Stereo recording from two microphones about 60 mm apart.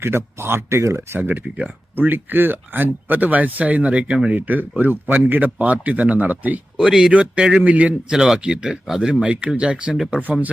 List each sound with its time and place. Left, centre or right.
0.0 s speech: right
1.2 s speech: right
6.7 s speech: centre